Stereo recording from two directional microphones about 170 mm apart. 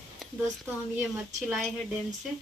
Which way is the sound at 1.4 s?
Centre (ahead or behind).